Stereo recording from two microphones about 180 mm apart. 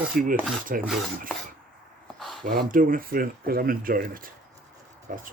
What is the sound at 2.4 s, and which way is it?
Speech, 50° right (ahead or behind).